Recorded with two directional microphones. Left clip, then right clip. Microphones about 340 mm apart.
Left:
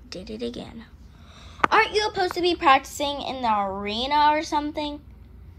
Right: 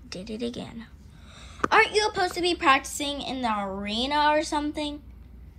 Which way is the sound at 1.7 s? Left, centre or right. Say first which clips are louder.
Right 1 dB; centre.